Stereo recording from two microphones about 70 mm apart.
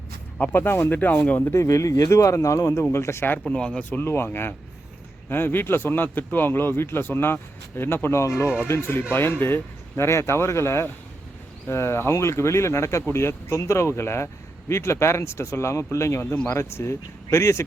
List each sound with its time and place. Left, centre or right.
0.3 s speech: left
1.5 s a man's voice: left
3.4 s speech: centre
4.0 s a man's voice: left
16.2 s speech: left
16.5 s a man's voice: left